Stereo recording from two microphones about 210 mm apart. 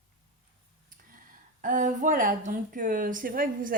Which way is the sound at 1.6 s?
40° right (ahead or behind).